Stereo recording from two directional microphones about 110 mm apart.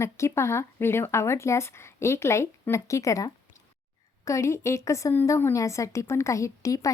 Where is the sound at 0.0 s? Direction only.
25° left (ahead or behind).